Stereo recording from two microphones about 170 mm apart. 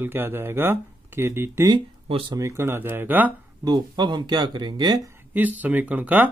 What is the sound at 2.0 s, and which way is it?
Speech, 35° right (ahead or behind).